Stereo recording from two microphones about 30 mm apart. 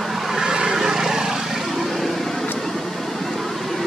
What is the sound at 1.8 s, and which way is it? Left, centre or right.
Vehicle, centre.